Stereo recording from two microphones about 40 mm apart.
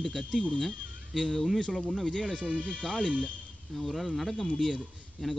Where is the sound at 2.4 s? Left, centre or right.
Left.